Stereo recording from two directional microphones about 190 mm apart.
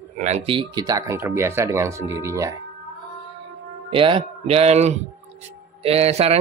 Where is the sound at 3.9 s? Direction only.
25° right (ahead or behind).